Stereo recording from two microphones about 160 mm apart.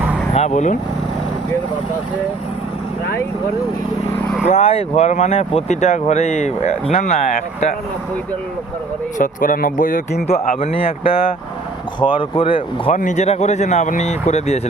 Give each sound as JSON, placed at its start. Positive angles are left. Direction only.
{"t": 0.3, "sound": "speech", "side_deg": 45}
{"t": 4.4, "sound": "speech", "side_deg": 45}
{"t": 9.1, "sound": "speech", "side_deg": 60}
{"t": 10.8, "sound": "speech", "side_deg": 35}
{"t": 12.9, "sound": "speech", "side_deg": 50}